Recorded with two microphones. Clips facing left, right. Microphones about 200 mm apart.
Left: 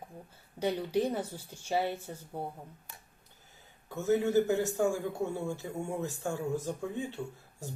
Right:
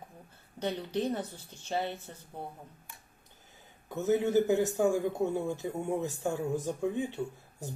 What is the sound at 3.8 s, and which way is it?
A man's voice, 20° right (ahead or behind).